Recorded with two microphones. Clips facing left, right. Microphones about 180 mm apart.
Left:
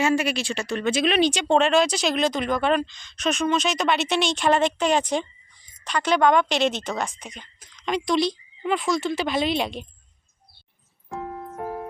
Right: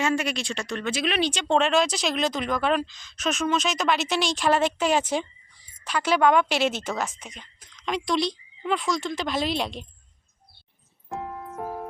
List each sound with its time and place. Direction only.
0.0 s speech: 5° left (ahead or behind)
0.9 s speech: 25° left (ahead or behind)
1.5 s speech: centre (ahead or behind)